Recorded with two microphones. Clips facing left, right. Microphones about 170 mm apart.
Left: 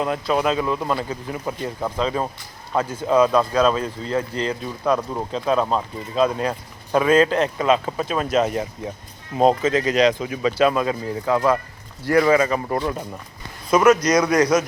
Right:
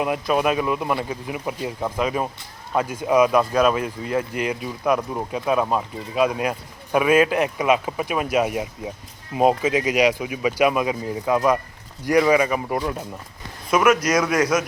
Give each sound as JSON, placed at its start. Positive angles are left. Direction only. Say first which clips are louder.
{"t": 0.0, "sound": "speech", "louder": "even", "side_deg": -15}